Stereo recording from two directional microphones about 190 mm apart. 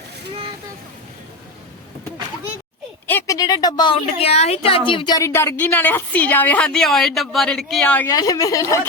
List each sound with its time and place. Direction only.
3.1 s a woman's voice: 15° left (ahead or behind)